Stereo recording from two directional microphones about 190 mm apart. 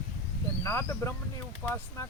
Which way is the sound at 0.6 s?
15° left (ahead or behind).